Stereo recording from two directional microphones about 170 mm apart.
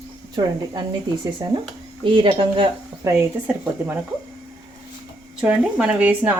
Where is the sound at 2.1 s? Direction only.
30° right (ahead or behind).